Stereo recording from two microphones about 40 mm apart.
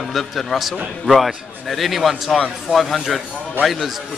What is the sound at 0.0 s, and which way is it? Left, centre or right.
A man's voice, centre.